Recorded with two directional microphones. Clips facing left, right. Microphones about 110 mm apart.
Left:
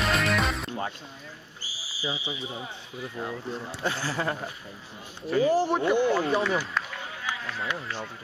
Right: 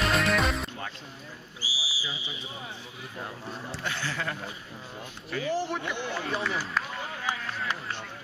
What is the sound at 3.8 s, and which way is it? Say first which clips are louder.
Speech: left 4 dB; 35° left (ahead or behind).